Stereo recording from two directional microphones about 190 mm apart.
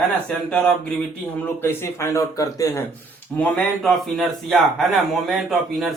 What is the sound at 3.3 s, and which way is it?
A man's voice, 5° left (ahead or behind).